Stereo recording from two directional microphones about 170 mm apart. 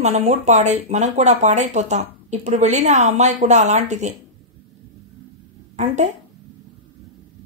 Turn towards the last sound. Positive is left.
turn(degrees=-40)  # may be behind; listen again after turning